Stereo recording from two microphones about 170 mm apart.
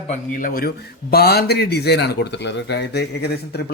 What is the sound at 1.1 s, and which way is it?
Speech, 70° left (ahead or behind).